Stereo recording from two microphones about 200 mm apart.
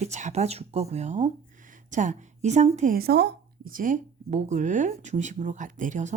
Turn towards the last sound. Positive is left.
turn(degrees=-40)  # may be behind; listen again after turning